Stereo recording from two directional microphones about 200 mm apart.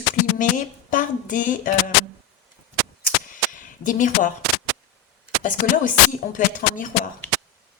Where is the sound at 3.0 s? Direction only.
40° left (ahead or behind).